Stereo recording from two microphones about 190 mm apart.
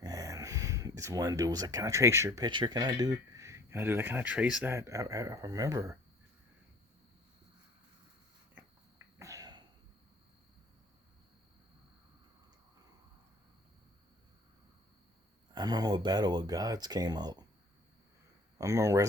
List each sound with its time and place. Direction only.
0.0 s speech: 20° right (ahead or behind)
8.5 s a sound: 15° right (ahead or behind)
15.5 s speech: 20° right (ahead or behind)
18.5 s speech: 15° right (ahead or behind)